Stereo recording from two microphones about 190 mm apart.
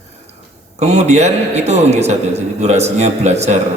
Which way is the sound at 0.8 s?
35° right (ahead or behind).